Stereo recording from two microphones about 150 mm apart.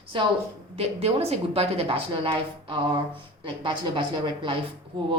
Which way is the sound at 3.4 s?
35° right (ahead or behind).